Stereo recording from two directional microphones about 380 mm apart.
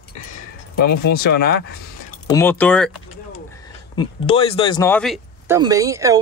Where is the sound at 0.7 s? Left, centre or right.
Left.